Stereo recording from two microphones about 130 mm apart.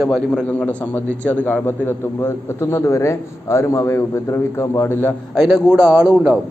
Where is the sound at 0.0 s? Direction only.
5° left (ahead or behind).